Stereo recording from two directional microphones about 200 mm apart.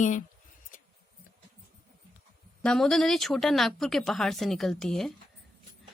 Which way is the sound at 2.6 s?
5° left (ahead or behind).